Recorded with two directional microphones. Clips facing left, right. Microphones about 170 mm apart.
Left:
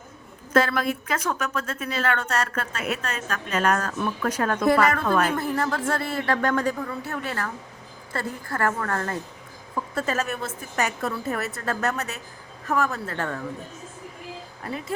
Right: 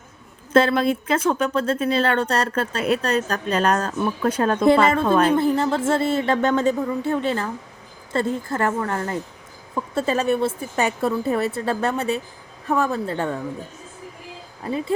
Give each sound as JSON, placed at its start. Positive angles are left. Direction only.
{"t": 0.5, "sound": "speech", "side_deg": -25}
{"t": 9.9, "sound": "speech", "side_deg": -30}